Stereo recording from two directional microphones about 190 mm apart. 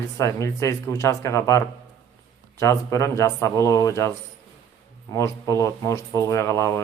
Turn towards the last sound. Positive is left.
turn(degrees=15)  # may be behind; listen again after turning